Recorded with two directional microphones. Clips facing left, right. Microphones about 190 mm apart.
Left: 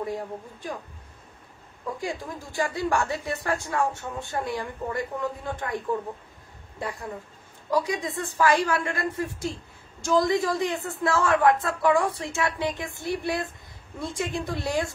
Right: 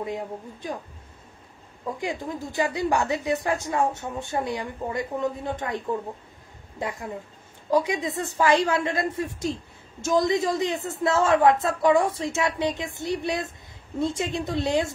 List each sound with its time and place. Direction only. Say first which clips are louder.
0.0 s a man's voice: even; 20° right (ahead or behind)
2.0 s a woman's voice: right 4 dB; 20° right (ahead or behind)
6.8 s a man's voice: right 2 dB; 20° right (ahead or behind)